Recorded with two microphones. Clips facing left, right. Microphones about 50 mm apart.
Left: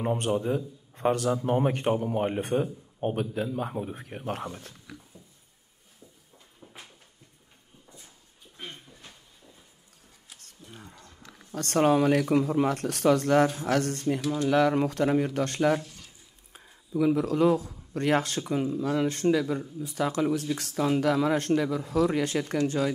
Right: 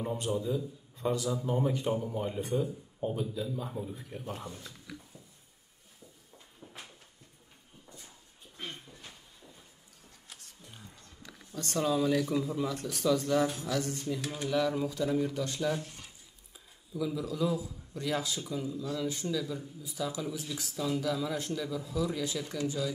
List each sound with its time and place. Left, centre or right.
0.0 s a man's voice: left
6.6 s a sound: centre
8.5 s a sound: centre
10.8 s roaring cats: left
11.5 s a man's voice: left
15.8 s speech: centre
16.5 s a man's voice: left